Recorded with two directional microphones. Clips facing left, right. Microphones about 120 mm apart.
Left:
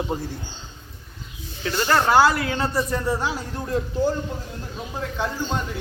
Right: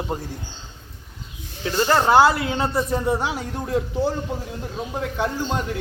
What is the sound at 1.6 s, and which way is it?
A man's voice, 20° right (ahead or behind).